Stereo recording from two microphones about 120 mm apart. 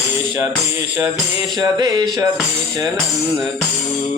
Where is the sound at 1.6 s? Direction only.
35° right (ahead or behind).